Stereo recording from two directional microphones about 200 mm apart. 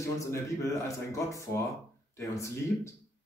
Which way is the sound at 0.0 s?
15° left (ahead or behind).